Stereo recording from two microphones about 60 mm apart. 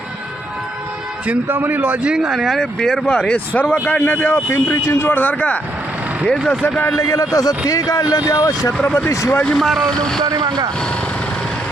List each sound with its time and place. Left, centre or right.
1.3 s a man's voice: right
2.1 s speech: centre
2.6 s speech: centre
3.5 s speech: left
4.4 s speech: left
5.0 s speech: left
6.9 s a man's voice: left
9.0 s speech: left
9.6 s speech: centre